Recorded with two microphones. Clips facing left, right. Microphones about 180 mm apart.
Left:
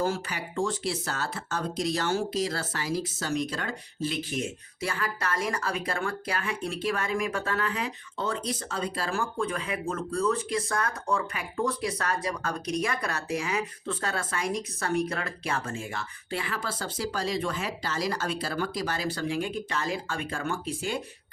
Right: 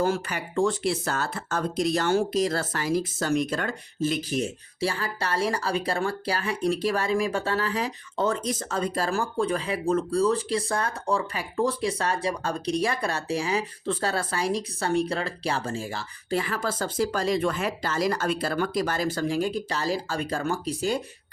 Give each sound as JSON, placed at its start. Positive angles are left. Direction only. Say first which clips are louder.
{"t": 0.0, "sound": "speech", "louder": "right 3 dB", "side_deg": -55}